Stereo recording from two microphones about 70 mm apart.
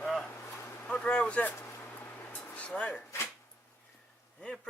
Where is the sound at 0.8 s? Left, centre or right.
Centre.